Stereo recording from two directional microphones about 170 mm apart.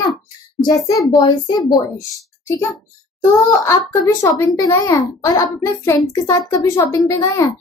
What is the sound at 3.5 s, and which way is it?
A woman's voice, 15° left (ahead or behind).